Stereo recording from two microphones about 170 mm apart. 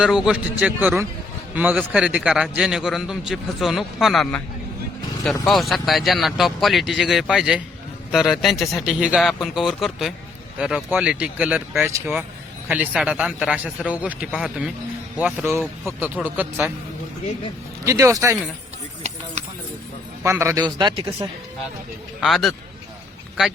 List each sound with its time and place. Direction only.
0.0 s a man's voice: 5° right (ahead or behind)
17.8 s speech: 20° right (ahead or behind)
19.0 s a sound: 45° right (ahead or behind)
20.3 s speech: 15° right (ahead or behind)
22.2 s a man's voice: centre (ahead or behind)